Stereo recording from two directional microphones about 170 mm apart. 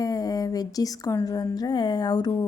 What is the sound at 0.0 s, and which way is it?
A woman's voice, 20° left (ahead or behind).